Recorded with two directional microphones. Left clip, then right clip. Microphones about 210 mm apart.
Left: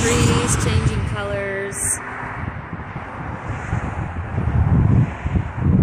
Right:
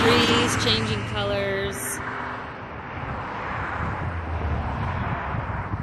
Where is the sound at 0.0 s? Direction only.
35° right (ahead or behind); by 1.1 s 55° right (ahead or behind).